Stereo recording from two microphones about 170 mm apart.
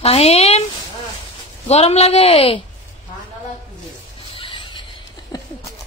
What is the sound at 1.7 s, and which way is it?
Speech, 35° left (ahead or behind).